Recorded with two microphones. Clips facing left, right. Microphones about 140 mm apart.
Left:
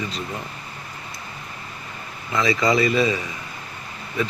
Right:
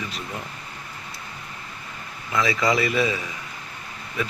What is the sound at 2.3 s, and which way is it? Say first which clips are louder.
Speech: left 2 dB; centre (ahead or behind).